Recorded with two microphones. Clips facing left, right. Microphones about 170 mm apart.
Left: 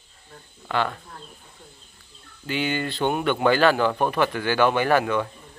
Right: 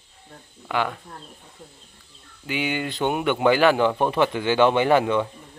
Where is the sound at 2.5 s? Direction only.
15° right (ahead or behind).